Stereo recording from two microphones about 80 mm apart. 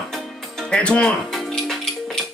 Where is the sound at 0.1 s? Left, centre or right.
Centre.